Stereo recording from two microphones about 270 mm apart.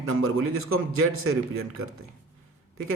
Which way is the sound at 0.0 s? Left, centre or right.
Right.